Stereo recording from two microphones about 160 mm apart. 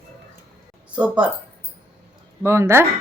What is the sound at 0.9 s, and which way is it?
Speech, 5° right (ahead or behind).